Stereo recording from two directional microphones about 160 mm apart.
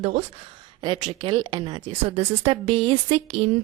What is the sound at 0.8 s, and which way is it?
A woman's voice, 30° right (ahead or behind).